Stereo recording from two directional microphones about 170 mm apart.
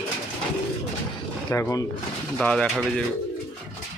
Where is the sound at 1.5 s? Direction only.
20° left (ahead or behind).